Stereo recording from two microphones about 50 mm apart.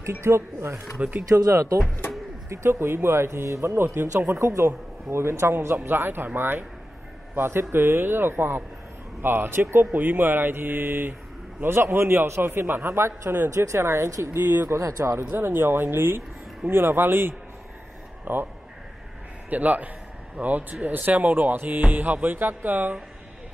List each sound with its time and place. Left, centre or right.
0.2 s speech: right
1.0 s speech: right
1.3 s speech: right
3.7 s speech: right
4.4 s speech: right
5.8 s speech: right
12.8 s speech: right
13.5 s speech: right
14.3 s speech: right
14.7 s speech: right
15.3 s speech: right
19.5 s music: right